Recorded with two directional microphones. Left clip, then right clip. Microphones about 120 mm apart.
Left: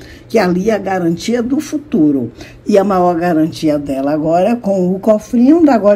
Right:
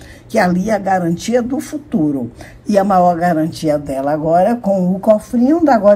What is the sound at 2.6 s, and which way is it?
Speech, 10° left (ahead or behind).